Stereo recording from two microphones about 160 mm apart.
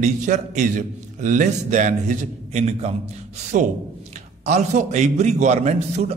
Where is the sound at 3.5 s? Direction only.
55° right (ahead or behind).